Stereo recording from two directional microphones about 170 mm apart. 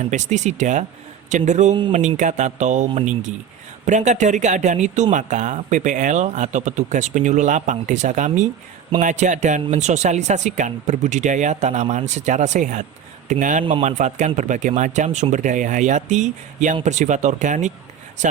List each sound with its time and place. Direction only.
0.0 s speech: 45° right (ahead or behind)